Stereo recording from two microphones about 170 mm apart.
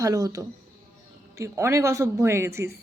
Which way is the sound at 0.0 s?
20° right (ahead or behind).